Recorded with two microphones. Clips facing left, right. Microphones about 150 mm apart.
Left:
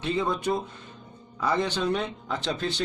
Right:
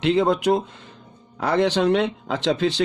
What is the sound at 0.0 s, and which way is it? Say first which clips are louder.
Speech: right 8 dB; 80° right.